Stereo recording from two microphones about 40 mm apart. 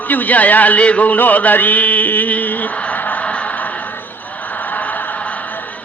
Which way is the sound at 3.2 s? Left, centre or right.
Left.